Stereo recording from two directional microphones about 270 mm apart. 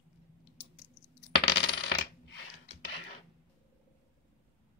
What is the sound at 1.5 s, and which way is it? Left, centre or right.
Coin, left.